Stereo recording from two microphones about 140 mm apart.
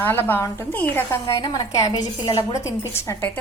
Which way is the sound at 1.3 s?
30° left (ahead or behind).